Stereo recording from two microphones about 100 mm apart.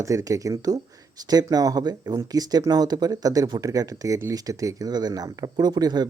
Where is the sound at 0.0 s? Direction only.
35° right (ahead or behind).